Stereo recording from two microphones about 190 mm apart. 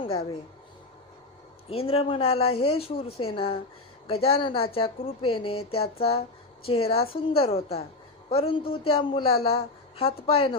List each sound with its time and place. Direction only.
1.7 s a man's voice: 30° left (ahead or behind)